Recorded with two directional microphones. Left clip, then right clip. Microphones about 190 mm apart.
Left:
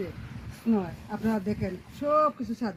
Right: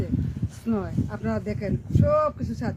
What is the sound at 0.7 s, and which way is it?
Speech, 5° right (ahead or behind).